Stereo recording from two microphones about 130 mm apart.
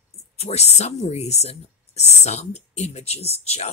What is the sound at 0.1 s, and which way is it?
Speech, 55° left (ahead or behind).